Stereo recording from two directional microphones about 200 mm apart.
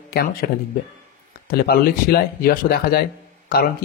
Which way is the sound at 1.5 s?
50° left (ahead or behind).